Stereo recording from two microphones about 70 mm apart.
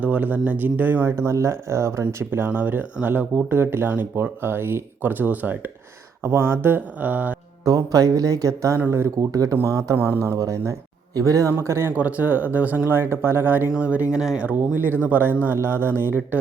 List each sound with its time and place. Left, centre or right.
0.0 s speech: right
1.1 s speech: right
2.5 s speech: right
7.6 s speech: right
8.9 s speech: right
9.3 s speech: right
10.0 s speech: right
10.3 s speech: right
11.5 s speech: right
11.9 s speech: right
12.9 s speech: right